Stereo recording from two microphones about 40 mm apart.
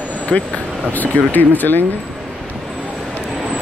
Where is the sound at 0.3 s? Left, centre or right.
Left.